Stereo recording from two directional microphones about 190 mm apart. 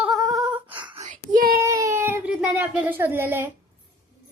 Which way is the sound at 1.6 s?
15° right (ahead or behind).